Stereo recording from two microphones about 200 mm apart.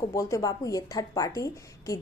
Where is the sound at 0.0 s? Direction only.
15° left (ahead or behind).